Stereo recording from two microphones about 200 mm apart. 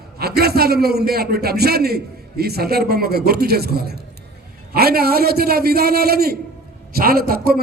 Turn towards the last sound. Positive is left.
turn(degrees=-50)  # may be behind; listen again after turning